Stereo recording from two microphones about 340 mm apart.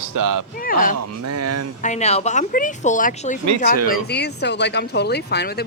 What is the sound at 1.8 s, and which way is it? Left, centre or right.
A woman's voice, centre.